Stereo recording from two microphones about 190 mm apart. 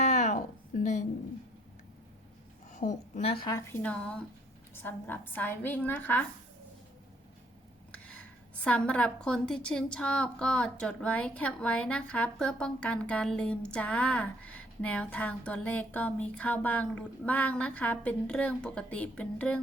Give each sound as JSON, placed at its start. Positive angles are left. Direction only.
{"t": 0.0, "sound": "a sound", "side_deg": 40}
{"t": 2.7, "sound": "a woman's voice", "side_deg": 35}
{"t": 3.7, "sound": "a woman's voice", "side_deg": 5}
{"t": 7.9, "sound": "a woman's voice", "side_deg": 5}